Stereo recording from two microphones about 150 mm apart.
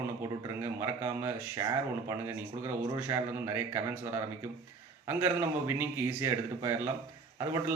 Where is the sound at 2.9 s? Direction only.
20° right (ahead or behind).